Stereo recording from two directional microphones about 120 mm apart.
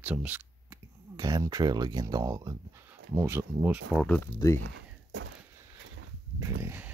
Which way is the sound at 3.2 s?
20° right (ahead or behind).